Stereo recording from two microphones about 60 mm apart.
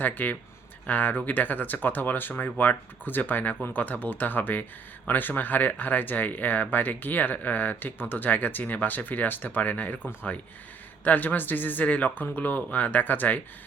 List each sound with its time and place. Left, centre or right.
0.0 s speech: left
11.0 s speech: left